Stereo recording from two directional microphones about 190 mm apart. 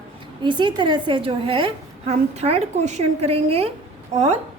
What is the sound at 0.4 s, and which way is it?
A woman's voice, 25° right (ahead or behind).